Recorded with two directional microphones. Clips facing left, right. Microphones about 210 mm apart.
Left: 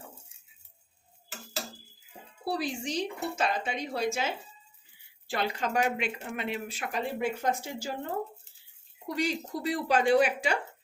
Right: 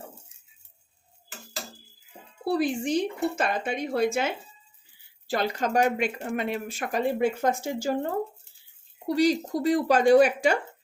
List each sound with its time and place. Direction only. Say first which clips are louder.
2.4 s speech: right 7 dB; 55° right (ahead or behind)
5.3 s speech: right 4 dB; 40° right (ahead or behind)
9.0 s speech: right 8 dB; 35° right (ahead or behind)